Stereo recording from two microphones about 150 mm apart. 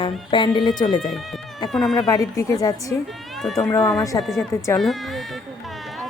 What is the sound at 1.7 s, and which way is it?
Speech, centre (ahead or behind).